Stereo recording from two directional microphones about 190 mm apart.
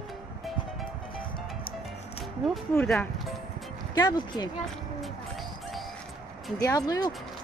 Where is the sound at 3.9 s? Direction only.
20° left (ahead or behind).